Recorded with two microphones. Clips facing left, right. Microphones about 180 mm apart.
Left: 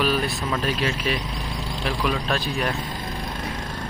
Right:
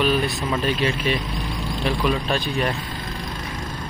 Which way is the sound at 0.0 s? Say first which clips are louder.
Right 2 dB; 5° left (ahead or behind).